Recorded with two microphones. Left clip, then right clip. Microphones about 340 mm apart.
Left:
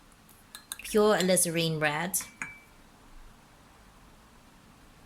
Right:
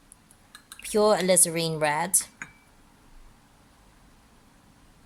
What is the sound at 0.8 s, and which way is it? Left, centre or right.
Speech, centre.